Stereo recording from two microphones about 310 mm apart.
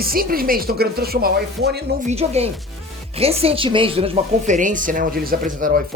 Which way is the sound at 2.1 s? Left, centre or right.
Centre.